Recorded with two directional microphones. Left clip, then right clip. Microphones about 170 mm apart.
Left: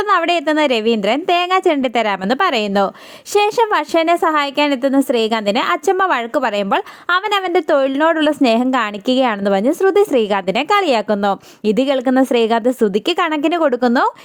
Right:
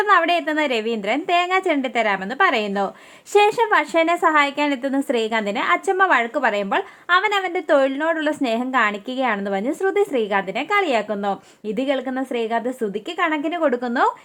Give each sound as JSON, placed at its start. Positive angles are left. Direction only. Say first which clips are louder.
{"t": 0.0, "sound": "a woman's voice", "louder": "left 2 dB", "side_deg": 40}
{"t": 4.0, "sound": "a woman's voice", "louder": "left 2 dB", "side_deg": 30}